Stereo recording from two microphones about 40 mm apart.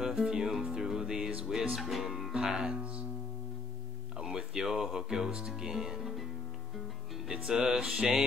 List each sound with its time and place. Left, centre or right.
0.0 s music: centre
1.8 s speech: centre
2.3 s speech: right
4.2 s music: centre
5.6 s speech: centre
7.2 s speech: centre